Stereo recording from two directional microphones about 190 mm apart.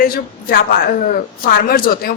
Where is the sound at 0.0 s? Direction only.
50° left (ahead or behind).